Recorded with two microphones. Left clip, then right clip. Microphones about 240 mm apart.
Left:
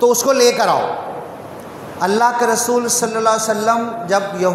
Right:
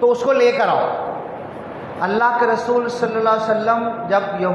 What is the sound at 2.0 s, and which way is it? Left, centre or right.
A man's voice, left.